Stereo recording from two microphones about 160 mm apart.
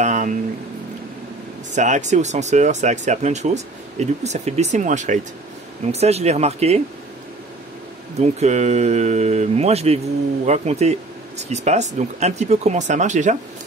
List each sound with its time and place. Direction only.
0.0 s a sound: 50° right (ahead or behind)
1.8 s speech: 50° right (ahead or behind)
8.2 s speech: 45° right (ahead or behind)